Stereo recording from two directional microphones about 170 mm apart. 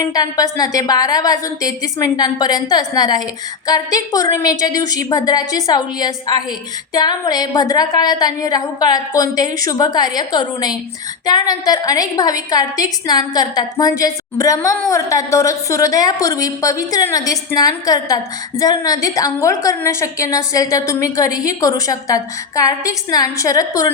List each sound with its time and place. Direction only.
0.1 s a woman's voice: 20° left (ahead or behind)